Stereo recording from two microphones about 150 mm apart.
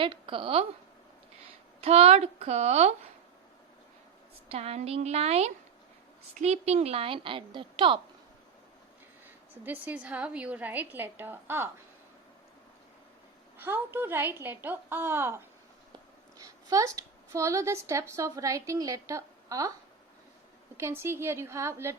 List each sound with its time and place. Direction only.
0.0 s a woman's voice: 35° right (ahead or behind)
1.8 s speech: 45° right (ahead or behind)
4.5 s a woman's voice: 45° right (ahead or behind)
9.2 s a woman's voice: 10° right (ahead or behind)
13.6 s a woman's voice: 15° right (ahead or behind)
16.4 s a woman's voice: 25° right (ahead or behind)
20.7 s a woman's voice: 15° right (ahead or behind)